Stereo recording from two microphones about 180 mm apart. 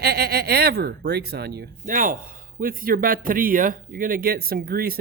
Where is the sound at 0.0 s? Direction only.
65° right (ahead or behind).